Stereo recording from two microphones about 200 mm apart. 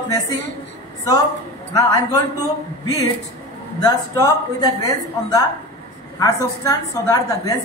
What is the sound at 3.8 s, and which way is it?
A woman's voice, 15° left (ahead or behind).